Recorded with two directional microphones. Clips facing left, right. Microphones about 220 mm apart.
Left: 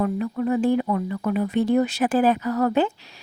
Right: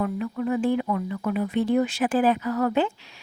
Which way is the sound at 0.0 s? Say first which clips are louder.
Left 3 dB; 35° left (ahead or behind).